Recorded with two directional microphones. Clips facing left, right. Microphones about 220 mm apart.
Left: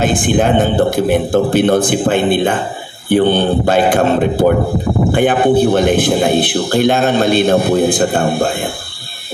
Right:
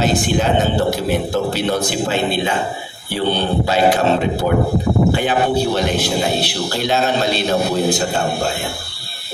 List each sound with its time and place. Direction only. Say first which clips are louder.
0.0 s a man's voice: left 4 dB; 50° left (ahead or behind)